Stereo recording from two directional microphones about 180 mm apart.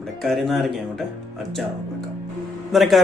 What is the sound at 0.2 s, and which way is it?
Speech, centre (ahead or behind).